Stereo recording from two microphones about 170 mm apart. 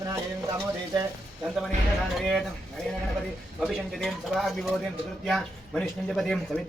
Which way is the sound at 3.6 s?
Centre (ahead or behind).